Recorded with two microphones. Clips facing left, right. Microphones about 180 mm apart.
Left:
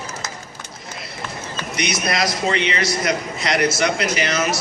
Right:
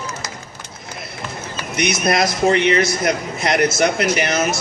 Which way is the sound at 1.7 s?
50° right (ahead or behind).